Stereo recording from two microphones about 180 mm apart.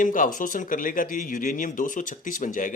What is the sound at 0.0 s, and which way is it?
Speech, 45° left (ahead or behind).